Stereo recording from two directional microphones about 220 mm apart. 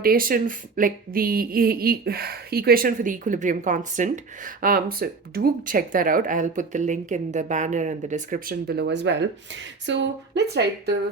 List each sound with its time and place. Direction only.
0.0 s speech: 40° right (ahead or behind)